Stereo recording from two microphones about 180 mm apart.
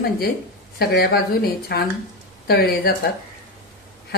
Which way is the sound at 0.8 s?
60° left (ahead or behind).